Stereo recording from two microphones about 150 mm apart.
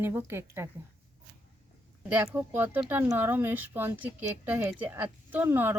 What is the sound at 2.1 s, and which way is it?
Speech, 15° right (ahead or behind).